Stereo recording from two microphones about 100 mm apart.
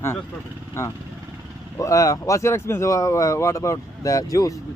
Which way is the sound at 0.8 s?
25° left (ahead or behind).